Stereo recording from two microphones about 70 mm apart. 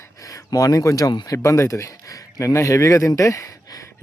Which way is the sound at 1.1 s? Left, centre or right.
Left.